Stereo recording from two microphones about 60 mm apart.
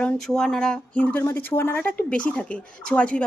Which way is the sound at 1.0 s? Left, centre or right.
Left.